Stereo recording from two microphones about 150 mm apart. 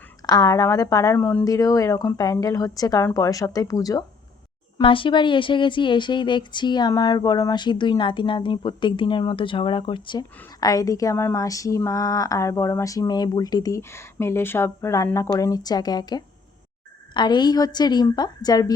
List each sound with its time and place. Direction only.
0.3 s speech: 25° left (ahead or behind)
4.8 s speech: 35° left (ahead or behind)